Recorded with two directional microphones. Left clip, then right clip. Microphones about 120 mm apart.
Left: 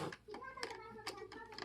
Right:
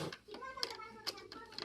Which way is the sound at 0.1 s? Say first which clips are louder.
Right 2 dB; 15° left (ahead or behind).